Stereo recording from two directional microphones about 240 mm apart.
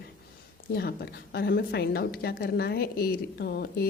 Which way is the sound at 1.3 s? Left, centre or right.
Left.